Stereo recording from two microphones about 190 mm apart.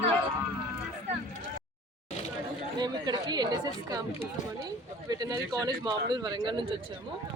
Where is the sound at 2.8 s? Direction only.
20° right (ahead or behind).